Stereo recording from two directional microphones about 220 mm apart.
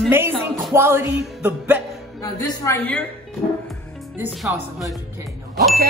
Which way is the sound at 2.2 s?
15° left (ahead or behind).